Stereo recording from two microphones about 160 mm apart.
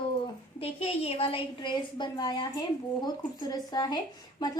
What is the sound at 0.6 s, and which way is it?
A woman's voice, 40° left (ahead or behind).